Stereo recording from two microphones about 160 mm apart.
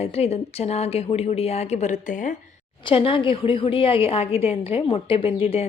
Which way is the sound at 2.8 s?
35° left (ahead or behind).